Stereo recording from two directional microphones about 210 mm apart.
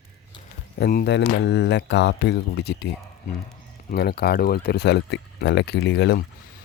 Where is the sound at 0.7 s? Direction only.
50° left (ahead or behind).